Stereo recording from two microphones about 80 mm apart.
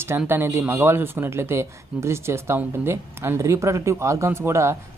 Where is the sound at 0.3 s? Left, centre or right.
Right.